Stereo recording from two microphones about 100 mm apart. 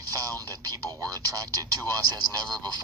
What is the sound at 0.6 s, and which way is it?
Speech, 40° right (ahead or behind).